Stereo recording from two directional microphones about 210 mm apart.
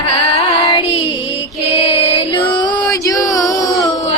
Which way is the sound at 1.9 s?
25° left (ahead or behind).